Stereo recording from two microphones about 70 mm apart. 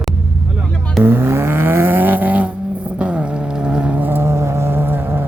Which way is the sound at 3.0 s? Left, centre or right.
Centre.